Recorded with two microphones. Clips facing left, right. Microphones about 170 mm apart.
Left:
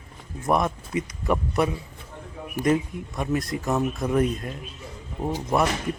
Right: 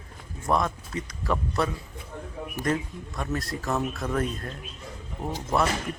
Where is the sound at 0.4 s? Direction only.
15° left (ahead or behind).